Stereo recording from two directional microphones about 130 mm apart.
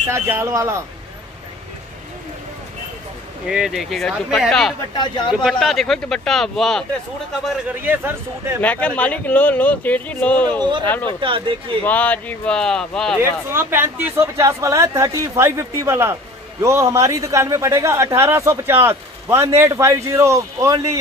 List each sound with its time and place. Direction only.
0.1 s a man's voice: 20° right (ahead or behind)
3.4 s speech: 5° right (ahead or behind)
4.9 s speech: 35° left (ahead or behind)
5.4 s speech: centre (ahead or behind)
7.6 s speech: 15° right (ahead or behind)
8.5 s speech: 10° left (ahead or behind)
11.1 s speech: 40° right (ahead or behind)
11.8 s speech: 10° left (ahead or behind)
13.2 s a man's voice: 20° right (ahead or behind)